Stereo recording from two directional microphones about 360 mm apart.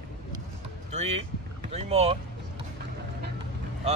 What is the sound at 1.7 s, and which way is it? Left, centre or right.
Speech, centre.